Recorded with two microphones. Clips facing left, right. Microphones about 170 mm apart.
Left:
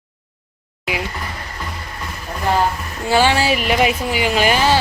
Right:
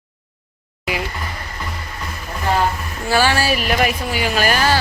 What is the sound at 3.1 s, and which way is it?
Speech, 20° left (ahead or behind).